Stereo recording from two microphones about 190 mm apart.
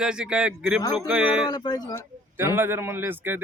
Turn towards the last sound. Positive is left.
turn(degrees=-10)  # may be behind; listen again after turning